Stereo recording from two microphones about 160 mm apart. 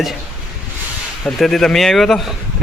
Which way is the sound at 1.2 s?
Centre (ahead or behind).